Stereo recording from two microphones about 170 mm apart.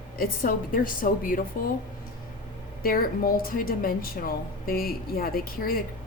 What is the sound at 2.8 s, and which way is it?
A woman's voice, 55° left (ahead or behind).